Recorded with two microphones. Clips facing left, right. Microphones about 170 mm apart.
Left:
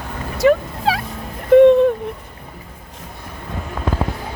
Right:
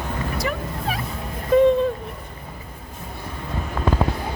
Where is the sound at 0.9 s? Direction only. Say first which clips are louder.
Left 9 dB; 90° left.